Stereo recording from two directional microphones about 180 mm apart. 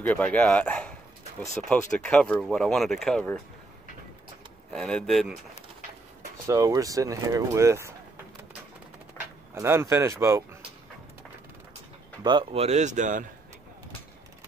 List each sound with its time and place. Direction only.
0.0 s speech: 5° left (ahead or behind)
4.7 s speech: 5° left (ahead or behind)
6.4 s speech: 20° right (ahead or behind)
9.5 s speech: 15° right (ahead or behind)
12.2 s speech: 25° right (ahead or behind); by 13.2 s 45° right (ahead or behind)